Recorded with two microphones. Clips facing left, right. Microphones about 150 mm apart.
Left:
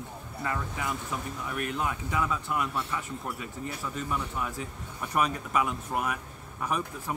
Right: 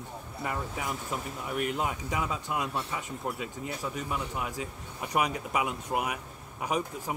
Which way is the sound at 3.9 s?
15° right (ahead or behind).